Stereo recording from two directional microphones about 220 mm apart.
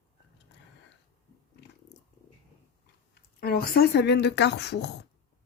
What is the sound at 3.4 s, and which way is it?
Speech, 45° left (ahead or behind).